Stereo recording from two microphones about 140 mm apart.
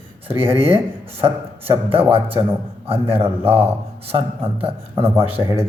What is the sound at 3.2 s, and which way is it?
Speech, 15° right (ahead or behind).